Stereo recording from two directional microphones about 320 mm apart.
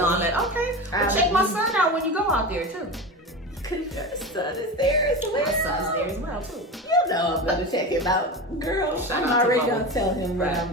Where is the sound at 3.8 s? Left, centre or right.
Centre.